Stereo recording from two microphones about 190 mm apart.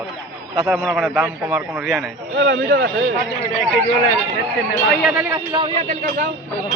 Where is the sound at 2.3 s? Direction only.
60° right (ahead or behind).